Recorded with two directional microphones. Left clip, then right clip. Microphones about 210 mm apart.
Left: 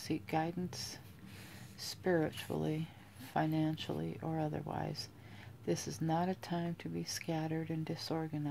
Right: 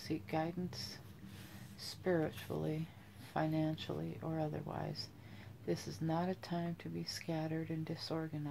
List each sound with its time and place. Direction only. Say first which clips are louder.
0.0 s speech: left 3 dB; 45° left (ahead or behind)